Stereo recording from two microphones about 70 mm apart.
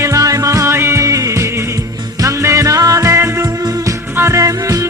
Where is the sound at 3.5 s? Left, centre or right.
Right.